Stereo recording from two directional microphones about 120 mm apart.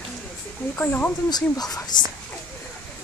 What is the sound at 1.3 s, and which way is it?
Speech, 35° left (ahead or behind).